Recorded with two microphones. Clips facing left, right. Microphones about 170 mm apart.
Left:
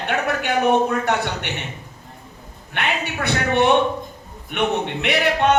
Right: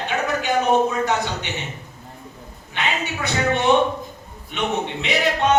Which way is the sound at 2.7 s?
60° left (ahead or behind).